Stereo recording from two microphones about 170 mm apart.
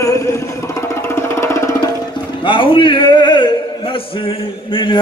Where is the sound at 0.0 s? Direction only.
15° left (ahead or behind).